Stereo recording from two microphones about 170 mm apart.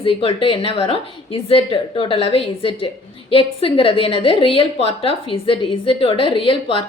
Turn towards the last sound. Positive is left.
turn(degrees=30)  # may be behind; listen again after turning